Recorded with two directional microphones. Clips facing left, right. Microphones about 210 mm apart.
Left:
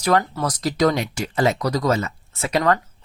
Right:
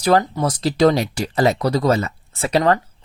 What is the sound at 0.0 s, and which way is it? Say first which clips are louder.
A man's voice: right 3 dB; 30° right (ahead or behind).